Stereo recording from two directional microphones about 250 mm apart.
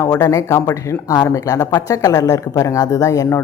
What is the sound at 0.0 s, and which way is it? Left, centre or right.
Speech, centre.